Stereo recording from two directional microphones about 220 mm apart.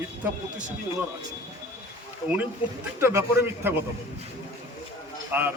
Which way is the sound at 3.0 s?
10° right (ahead or behind).